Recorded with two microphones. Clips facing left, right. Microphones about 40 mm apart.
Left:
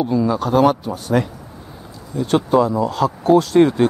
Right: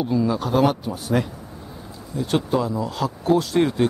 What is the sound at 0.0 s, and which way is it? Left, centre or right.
Speech, centre.